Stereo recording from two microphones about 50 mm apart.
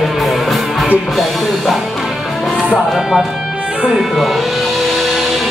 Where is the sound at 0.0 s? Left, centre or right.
Centre.